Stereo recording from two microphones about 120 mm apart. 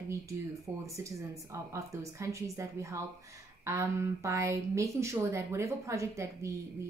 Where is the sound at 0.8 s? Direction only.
25° right (ahead or behind).